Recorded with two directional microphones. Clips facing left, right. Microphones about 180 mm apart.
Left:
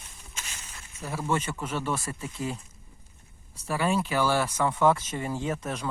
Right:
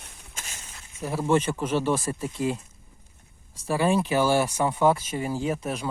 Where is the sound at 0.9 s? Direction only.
20° right (ahead or behind).